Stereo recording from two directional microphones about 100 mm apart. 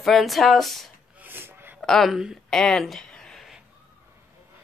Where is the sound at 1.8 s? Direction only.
5° left (ahead or behind).